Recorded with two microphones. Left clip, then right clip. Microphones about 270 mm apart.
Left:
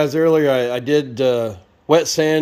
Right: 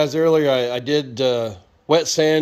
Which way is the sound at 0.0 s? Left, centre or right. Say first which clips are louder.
Left 1 dB; centre.